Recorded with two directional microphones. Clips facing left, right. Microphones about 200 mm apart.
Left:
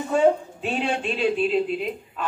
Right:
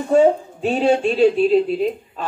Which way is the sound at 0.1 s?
40° right (ahead or behind).